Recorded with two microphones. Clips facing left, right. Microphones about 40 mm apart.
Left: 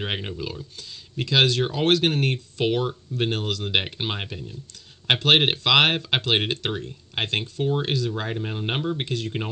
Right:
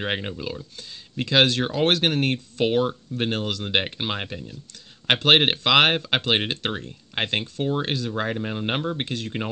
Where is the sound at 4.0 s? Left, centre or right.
Centre.